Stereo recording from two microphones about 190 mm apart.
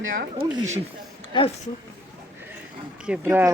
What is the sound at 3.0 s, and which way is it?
Speech, 10° right (ahead or behind).